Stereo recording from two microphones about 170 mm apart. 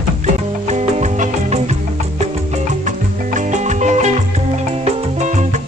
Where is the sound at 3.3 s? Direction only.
45° right (ahead or behind).